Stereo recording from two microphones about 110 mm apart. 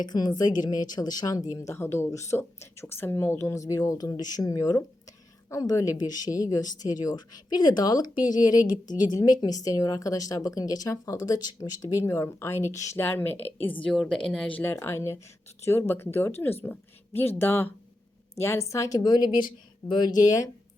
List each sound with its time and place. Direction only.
0.0 s speech: 40° left (ahead or behind); by 13.7 s 15° left (ahead or behind)
13.9 s a woman's voice: centre (ahead or behind)
14.3 s speech: 10° left (ahead or behind); by 20.5 s 35° left (ahead or behind)